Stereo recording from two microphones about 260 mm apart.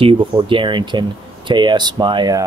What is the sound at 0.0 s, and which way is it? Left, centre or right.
Speech, centre.